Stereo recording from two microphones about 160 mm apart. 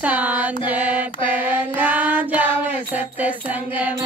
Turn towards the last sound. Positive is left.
turn(degrees=-10)  # may be behind; listen again after turning